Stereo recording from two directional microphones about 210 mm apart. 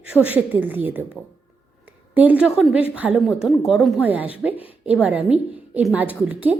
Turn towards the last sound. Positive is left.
turn(degrees=-5)  # may be behind; listen again after turning